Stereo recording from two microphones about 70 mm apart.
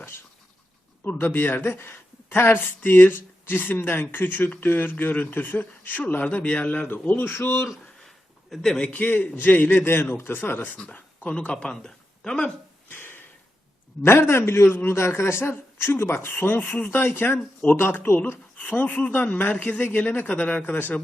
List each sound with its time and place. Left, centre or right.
1.0 s speech: left
8.0 s speech: centre
12.9 s a sound: left
14.0 s a man's voice: left